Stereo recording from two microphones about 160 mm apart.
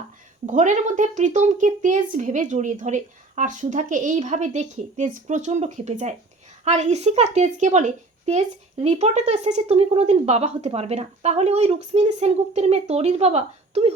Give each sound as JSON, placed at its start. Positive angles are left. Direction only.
{"t": 0.4, "sound": "a woman's voice", "side_deg": -50}